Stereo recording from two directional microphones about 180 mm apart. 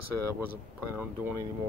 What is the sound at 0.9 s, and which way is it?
Speech, 10° right (ahead or behind).